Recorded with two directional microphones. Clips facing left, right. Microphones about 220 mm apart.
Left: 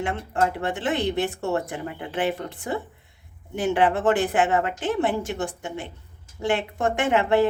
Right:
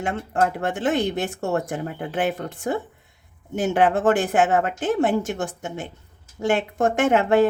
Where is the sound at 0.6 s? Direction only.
45° right (ahead or behind).